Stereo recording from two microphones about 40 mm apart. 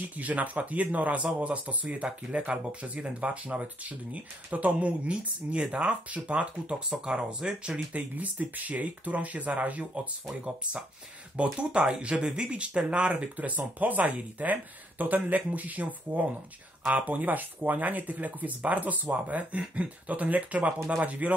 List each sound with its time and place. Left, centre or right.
0.2 s speech: right
7.9 s speech: right
11.4 s speech: right
13.1 s speech: right